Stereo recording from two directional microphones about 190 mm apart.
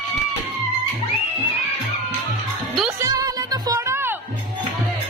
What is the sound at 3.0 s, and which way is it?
Music, 20° right (ahead or behind).